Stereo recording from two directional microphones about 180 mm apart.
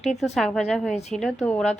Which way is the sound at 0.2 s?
Centre (ahead or behind).